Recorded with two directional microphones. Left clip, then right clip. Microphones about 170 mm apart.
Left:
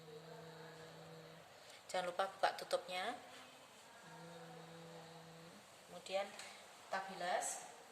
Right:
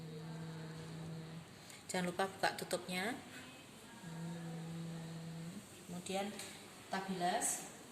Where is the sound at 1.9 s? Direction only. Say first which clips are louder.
Right 1 dB; 35° left (ahead or behind).